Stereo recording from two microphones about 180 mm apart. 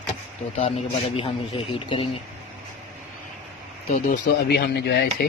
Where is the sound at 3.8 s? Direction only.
60° left (ahead or behind).